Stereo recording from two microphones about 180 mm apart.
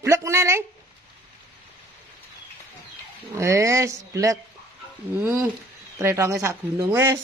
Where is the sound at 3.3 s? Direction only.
15° right (ahead or behind).